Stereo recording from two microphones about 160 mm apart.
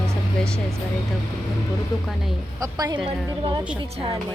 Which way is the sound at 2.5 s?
20° right (ahead or behind).